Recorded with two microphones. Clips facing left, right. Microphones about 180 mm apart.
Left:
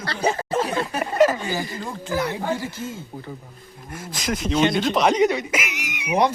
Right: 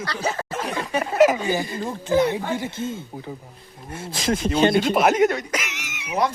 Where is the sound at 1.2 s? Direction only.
15° right (ahead or behind).